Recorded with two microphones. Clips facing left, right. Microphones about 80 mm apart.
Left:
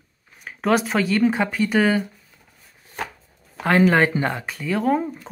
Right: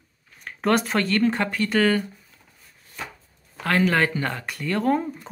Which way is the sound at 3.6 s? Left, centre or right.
Left.